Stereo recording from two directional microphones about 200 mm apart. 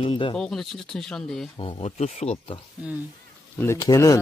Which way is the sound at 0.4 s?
Centre (ahead or behind).